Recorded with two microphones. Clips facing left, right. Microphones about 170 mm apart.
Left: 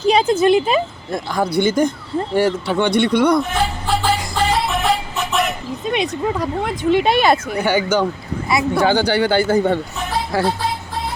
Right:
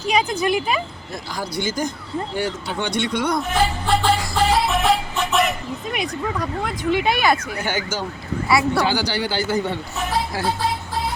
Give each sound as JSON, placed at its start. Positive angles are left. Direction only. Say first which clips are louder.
{"t": 0.0, "sound": "speech", "louder": "left 6 dB", "side_deg": 30}
{"t": 1.1, "sound": "speech", "louder": "left 9 dB", "side_deg": 55}
{"t": 3.4, "sound": "speech", "louder": "even", "side_deg": 0}
{"t": 4.4, "sound": "music", "louder": "even", "side_deg": 0}
{"t": 5.8, "sound": "speech", "louder": "left 7 dB", "side_deg": 25}
{"t": 7.6, "sound": "speech", "louder": "left 8 dB", "side_deg": 60}